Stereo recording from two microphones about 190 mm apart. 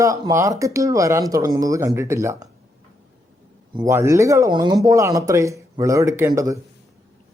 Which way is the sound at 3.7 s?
15° right (ahead or behind).